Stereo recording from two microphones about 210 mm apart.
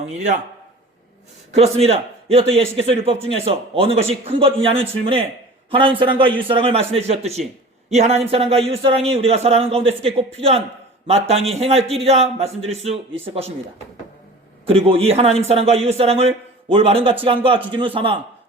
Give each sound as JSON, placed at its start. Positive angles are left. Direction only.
{"t": 1.5, "sound": "a man's voice", "side_deg": -30}
{"t": 14.7, "sound": "a man's voice", "side_deg": -25}